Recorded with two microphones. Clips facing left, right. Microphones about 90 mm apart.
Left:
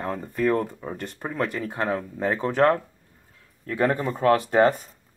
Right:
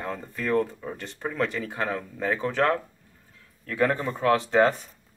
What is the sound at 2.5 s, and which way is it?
Speech, 40° left (ahead or behind).